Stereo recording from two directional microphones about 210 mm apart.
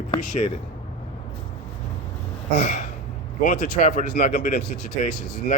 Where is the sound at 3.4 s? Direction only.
35° left (ahead or behind).